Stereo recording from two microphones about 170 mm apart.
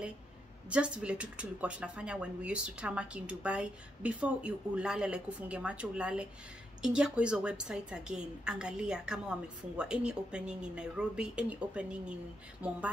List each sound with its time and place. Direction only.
0.7 s a woman's voice: 5° right (ahead or behind)